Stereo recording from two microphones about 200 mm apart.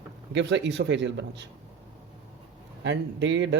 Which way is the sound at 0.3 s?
60° right (ahead or behind).